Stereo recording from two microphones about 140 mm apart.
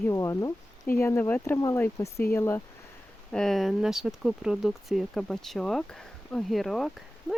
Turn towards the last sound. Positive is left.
turn(degrees=0)  # may be behind; listen again after turning